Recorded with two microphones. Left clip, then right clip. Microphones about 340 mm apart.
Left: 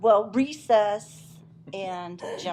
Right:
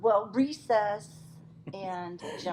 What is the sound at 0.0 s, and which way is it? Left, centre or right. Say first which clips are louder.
A woman's voice: left 5 dB; left.